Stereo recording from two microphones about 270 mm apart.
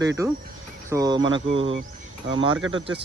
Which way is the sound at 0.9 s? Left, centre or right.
Centre.